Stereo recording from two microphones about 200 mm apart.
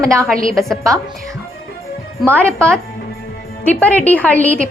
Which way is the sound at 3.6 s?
5° left (ahead or behind).